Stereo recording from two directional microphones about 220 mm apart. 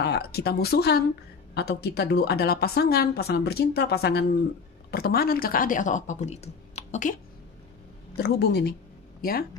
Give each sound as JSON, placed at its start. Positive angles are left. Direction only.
{"t": 0.0, "sound": "a woman's voice", "side_deg": 45}
{"t": 8.2, "sound": "a woman's voice", "side_deg": 50}